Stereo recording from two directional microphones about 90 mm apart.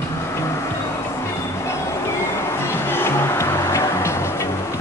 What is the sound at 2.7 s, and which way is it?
Music, 25° left (ahead or behind).